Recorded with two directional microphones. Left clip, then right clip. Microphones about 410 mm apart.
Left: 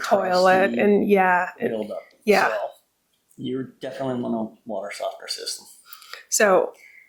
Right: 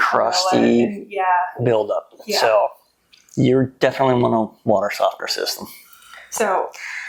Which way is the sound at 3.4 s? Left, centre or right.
Right.